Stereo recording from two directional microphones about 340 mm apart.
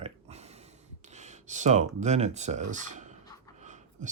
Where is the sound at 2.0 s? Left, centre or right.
Centre.